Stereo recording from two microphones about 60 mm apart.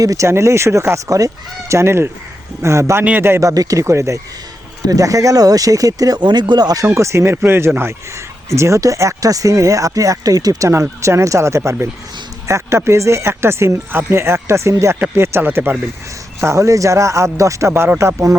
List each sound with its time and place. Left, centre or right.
0.0 s speech: right
0.3 s fowl: right
3.2 s speech: right
3.4 s speech: right
4.9 s speech: right
6.8 s fowl: right
7.8 s speech: right
10.7 s fowl: right
15.1 s speech: right
16.4 s speech: right
17.9 s fowl: right